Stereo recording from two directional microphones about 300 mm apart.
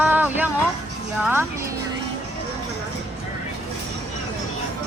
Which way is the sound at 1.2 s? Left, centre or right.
Centre.